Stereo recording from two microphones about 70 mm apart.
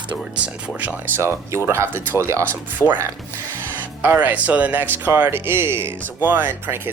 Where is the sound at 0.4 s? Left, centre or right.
Centre.